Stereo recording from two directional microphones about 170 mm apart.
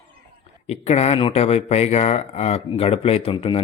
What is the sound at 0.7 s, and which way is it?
Speech, 40° left (ahead or behind).